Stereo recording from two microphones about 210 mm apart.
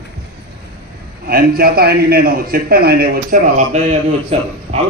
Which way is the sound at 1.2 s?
45° right (ahead or behind).